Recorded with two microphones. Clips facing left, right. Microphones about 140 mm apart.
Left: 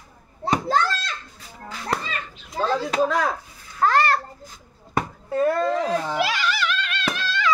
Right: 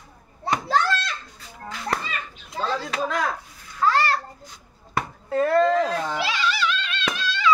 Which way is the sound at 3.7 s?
50° left (ahead or behind).